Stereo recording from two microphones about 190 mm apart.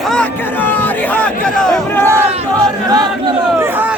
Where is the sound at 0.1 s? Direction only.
5° left (ahead or behind).